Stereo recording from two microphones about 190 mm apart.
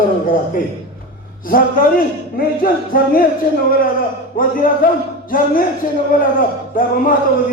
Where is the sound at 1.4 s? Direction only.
50° left (ahead or behind).